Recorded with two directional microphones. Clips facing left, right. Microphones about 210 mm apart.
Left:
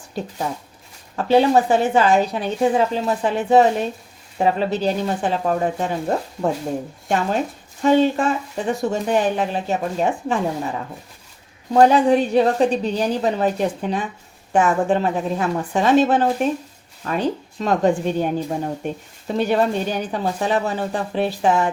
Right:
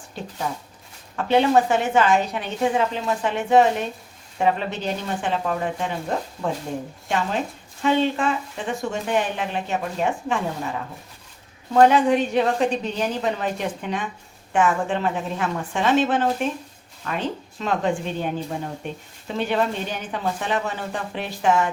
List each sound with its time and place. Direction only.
1.1 s a woman's voice: 35° left (ahead or behind)
7.8 s a woman's voice: 40° left (ahead or behind)
11.7 s a woman's voice: 35° left (ahead or behind)